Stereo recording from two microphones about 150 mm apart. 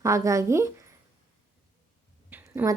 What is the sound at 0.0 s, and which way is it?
Speech, 20° right (ahead or behind).